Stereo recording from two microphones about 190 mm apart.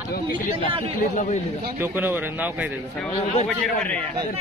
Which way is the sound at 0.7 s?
30° right (ahead or behind).